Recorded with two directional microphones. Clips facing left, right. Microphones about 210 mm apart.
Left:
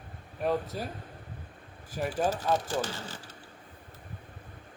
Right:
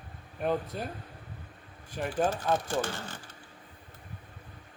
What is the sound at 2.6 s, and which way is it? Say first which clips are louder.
Speech: right 1 dB; 55° right (ahead or behind).